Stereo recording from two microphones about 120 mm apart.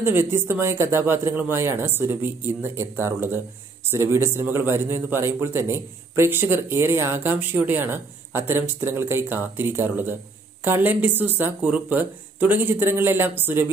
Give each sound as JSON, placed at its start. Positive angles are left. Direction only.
{"t": 0.0, "sound": "a man's voice", "side_deg": -20}